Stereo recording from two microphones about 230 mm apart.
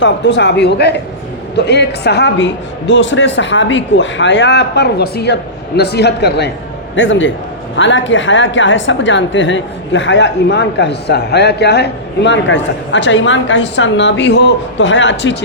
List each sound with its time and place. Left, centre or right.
0.0 s a woman's voice: left